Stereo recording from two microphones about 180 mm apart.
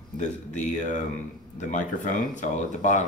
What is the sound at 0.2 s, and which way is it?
Speech, 45° left (ahead or behind).